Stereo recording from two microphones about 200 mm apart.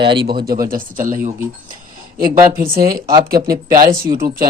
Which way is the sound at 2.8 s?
15° right (ahead or behind).